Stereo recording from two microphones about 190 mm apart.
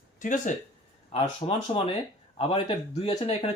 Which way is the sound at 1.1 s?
30° left (ahead or behind).